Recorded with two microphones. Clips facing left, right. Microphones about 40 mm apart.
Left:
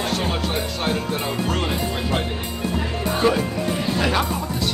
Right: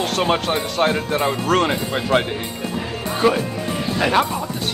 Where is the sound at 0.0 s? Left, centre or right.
Right.